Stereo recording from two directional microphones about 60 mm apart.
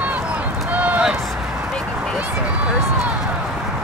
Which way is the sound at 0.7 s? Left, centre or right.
Right.